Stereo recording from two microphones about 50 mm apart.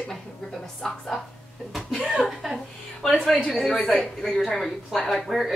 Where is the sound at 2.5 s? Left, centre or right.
Centre.